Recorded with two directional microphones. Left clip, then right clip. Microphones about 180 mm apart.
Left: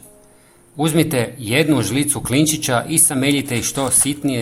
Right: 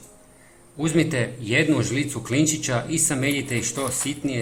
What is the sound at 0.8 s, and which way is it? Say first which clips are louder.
Speech: left 5 dB; 40° left (ahead or behind).